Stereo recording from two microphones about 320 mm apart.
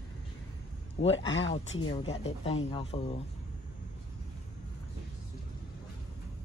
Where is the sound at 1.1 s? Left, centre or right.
Left.